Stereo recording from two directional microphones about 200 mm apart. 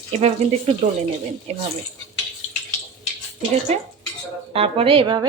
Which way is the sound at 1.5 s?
30° right (ahead or behind).